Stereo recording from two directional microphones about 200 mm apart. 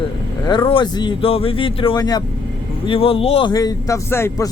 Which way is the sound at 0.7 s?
25° left (ahead or behind).